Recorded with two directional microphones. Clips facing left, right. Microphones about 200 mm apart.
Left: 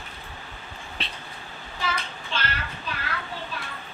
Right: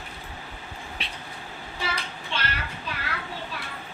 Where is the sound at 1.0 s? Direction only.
10° right (ahead or behind).